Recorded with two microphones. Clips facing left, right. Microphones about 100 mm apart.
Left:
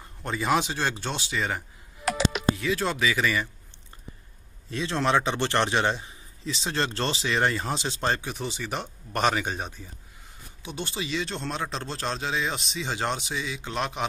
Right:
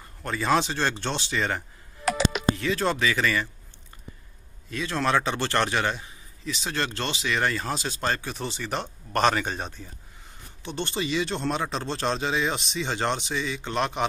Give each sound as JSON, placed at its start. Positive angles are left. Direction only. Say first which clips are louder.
{"t": 0.2, "sound": "a man's voice", "louder": "right 1 dB", "side_deg": 15}
{"t": 4.6, "sound": "a man's voice", "louder": "even", "side_deg": 25}